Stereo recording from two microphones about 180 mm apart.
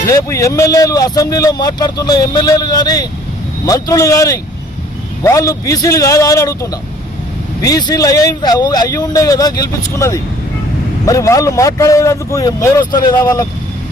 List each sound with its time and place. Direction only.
0.0 s speech: 20° left (ahead or behind)